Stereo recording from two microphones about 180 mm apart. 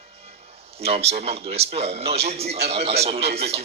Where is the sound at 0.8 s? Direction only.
35° right (ahead or behind).